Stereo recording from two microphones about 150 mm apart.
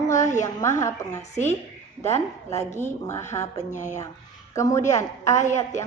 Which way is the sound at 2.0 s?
50° left (ahead or behind).